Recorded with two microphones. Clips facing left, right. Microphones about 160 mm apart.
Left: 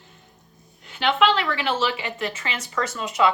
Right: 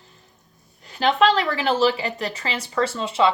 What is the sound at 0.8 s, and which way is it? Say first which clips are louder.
A woman's voice: right 2 dB; 40° right (ahead or behind).